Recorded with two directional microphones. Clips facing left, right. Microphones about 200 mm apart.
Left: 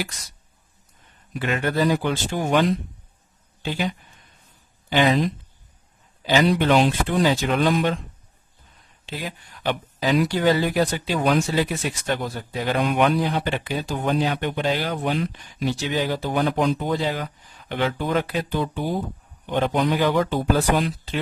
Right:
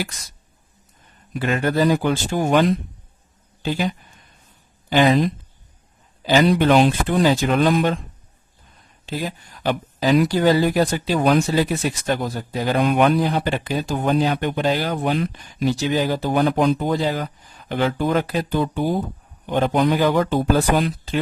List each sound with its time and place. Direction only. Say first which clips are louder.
1.4 s speech: right 3 dB; 40° right (ahead or behind)
6.2 s speech: right 3 dB; 45° right (ahead or behind)
9.0 s speech: right 5 dB; 40° right (ahead or behind)